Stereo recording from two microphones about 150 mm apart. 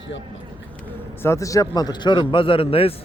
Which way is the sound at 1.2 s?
20° left (ahead or behind).